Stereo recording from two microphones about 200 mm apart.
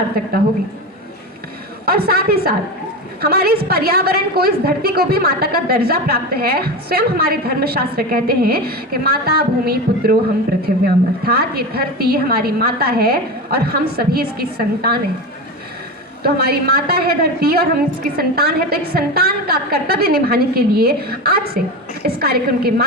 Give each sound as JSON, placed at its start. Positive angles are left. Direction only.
{"t": 1.8, "sound": "a woman's voice", "side_deg": -50}
{"t": 16.2, "sound": "a woman's voice", "side_deg": -50}